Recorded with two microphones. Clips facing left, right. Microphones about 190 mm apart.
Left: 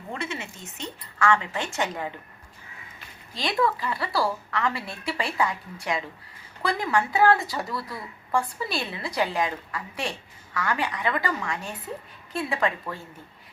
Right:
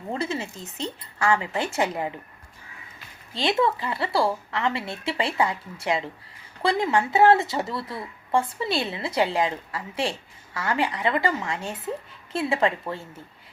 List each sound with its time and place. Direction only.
0.1 s a woman's voice: 35° right (ahead or behind)
3.3 s a woman's voice: 25° right (ahead or behind)